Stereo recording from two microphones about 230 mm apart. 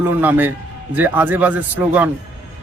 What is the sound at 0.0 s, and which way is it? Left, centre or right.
A man's voice, centre.